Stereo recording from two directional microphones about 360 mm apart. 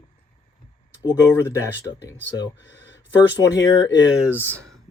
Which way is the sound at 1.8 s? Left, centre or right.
Centre.